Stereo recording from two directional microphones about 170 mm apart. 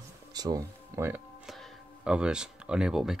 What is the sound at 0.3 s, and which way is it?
Speech, 20° right (ahead or behind).